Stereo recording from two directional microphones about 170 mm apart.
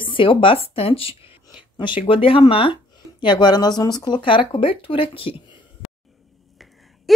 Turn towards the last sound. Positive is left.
turn(degrees=30)  # may be behind; listen again after turning